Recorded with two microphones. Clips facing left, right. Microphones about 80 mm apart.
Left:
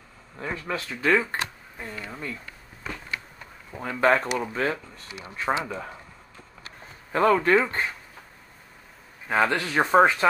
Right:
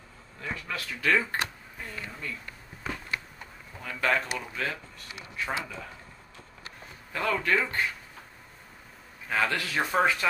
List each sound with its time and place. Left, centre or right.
0.4 s speech: left
3.8 s speech: left
7.1 s speech: left
9.3 s speech: left